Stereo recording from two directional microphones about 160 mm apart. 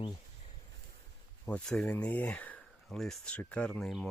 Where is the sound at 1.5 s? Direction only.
5° left (ahead or behind).